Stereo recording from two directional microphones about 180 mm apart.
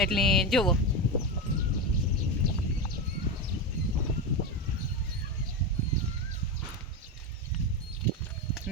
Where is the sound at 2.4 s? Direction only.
55° right (ahead or behind).